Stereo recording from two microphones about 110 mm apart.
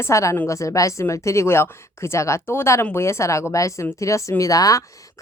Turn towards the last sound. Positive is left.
turn(degrees=30)  # may be behind; listen again after turning